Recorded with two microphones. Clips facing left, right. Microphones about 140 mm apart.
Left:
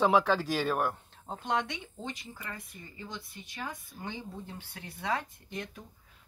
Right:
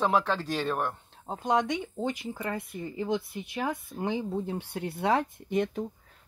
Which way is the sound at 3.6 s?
70° right (ahead or behind).